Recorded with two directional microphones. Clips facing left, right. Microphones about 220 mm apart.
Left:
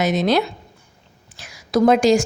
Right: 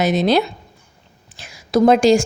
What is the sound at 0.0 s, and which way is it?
Speech, 30° right (ahead or behind).